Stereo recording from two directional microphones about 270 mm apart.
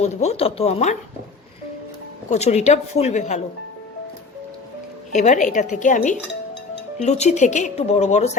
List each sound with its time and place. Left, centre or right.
0.0 s a woman's voice: left
2.3 s a woman's voice: left
5.1 s a woman's voice: left